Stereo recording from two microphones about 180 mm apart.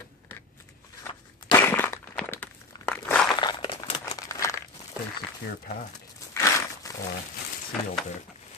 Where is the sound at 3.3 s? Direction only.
25° left (ahead or behind).